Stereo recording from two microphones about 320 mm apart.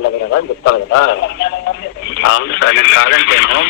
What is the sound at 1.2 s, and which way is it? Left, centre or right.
Speech, left.